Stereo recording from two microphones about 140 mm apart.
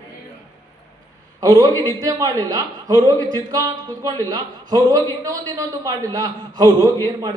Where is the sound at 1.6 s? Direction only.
25° right (ahead or behind).